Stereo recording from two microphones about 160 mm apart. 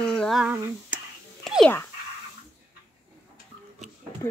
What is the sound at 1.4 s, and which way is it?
Whispering, centre (ahead or behind).